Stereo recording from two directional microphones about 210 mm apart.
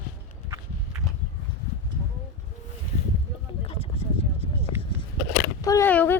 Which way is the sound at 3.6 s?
25° left (ahead or behind).